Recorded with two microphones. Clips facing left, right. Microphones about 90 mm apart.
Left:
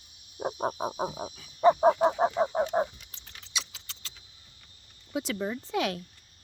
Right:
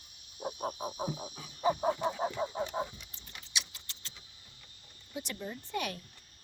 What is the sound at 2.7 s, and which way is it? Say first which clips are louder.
Keys jangling: left 8 dB; 70° left (ahead or behind).